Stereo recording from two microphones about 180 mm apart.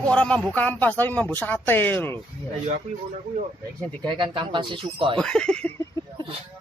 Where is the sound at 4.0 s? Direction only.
25° right (ahead or behind).